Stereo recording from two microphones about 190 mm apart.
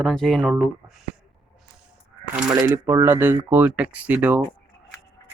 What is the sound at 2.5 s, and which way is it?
Speech, 15° right (ahead or behind).